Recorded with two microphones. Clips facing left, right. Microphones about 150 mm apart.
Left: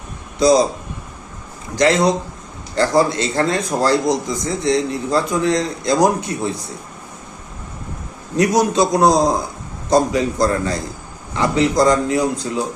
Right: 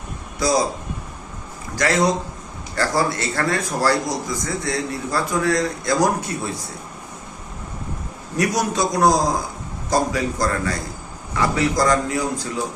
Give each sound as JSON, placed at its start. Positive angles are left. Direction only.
{"t": 0.3, "sound": "a man's voice", "side_deg": 20}
{"t": 1.7, "sound": "a man's voice", "side_deg": 20}
{"t": 8.4, "sound": "a man's voice", "side_deg": 20}